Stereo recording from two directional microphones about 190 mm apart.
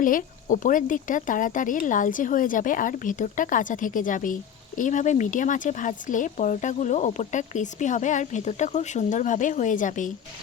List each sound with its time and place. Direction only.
0.0 s speech: 45° left (ahead or behind)